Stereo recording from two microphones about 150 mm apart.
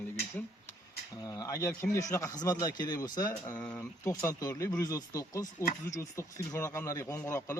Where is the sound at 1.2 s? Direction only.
25° left (ahead or behind).